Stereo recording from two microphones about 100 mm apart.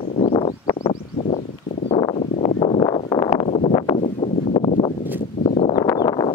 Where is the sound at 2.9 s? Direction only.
50° left (ahead or behind).